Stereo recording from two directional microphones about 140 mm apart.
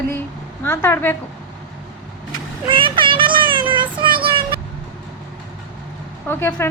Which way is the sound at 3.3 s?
35° right (ahead or behind).